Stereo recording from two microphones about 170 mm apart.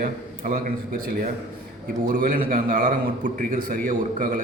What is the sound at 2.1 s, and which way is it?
A man's voice, 55° right (ahead or behind).